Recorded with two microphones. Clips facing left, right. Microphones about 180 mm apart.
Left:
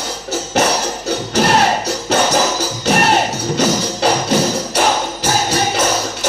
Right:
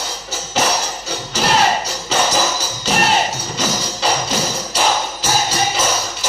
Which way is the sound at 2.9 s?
60° left (ahead or behind).